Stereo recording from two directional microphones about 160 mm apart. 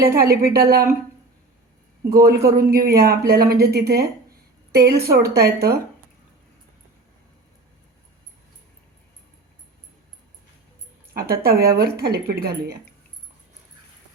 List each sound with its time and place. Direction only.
0.2 s speech: 75° right (ahead or behind)
2.2 s speech: 75° right (ahead or behind)
11.1 s speech: 70° right (ahead or behind)
11.8 s speech: 85° right